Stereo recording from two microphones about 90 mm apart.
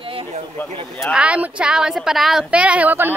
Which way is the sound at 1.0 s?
10° right (ahead or behind).